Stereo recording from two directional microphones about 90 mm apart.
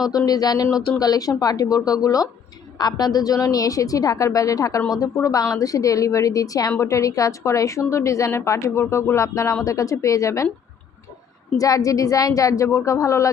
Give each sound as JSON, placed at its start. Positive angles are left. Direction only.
{"t": 0.1, "sound": "a woman's voice", "side_deg": 45}
{"t": 11.5, "sound": "a woman's voice", "side_deg": 40}